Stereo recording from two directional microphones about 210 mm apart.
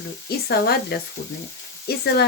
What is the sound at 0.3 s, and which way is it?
Speech, 50° left (ahead or behind).